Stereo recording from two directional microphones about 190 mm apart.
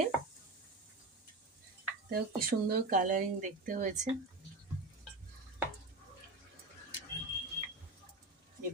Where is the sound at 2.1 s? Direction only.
50° right (ahead or behind).